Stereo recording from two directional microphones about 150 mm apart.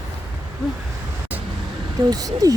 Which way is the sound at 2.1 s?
25° right (ahead or behind).